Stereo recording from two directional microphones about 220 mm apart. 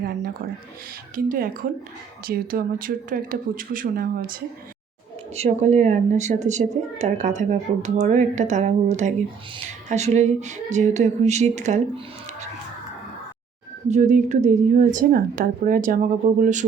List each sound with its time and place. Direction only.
1.1 s a woman's voice: 40° right (ahead or behind)
5.3 s a woman's voice: 30° right (ahead or behind)
13.8 s a woman's voice: 35° right (ahead or behind)